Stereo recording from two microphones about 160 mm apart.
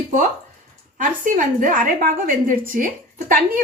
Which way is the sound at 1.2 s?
55° right (ahead or behind).